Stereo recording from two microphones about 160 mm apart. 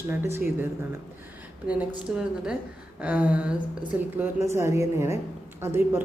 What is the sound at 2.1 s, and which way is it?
A woman's voice, 5° right (ahead or behind).